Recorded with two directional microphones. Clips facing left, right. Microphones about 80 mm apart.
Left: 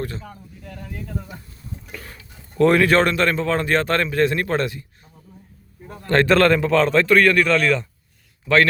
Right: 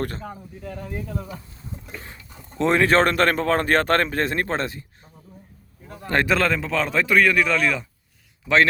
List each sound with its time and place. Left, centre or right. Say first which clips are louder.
0.0 s speech: right 1 dB; right
1.5 s a sound: left 1 dB; right
2.8 s a man's voice: even; right
6.0 s a man's voice: left 4 dB; centre
6.2 s a man's voice: left 6 dB; centre